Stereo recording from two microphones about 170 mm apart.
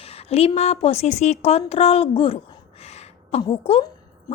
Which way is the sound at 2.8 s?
40° left (ahead or behind).